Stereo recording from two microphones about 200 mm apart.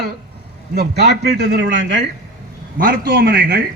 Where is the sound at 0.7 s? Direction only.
55° right (ahead or behind).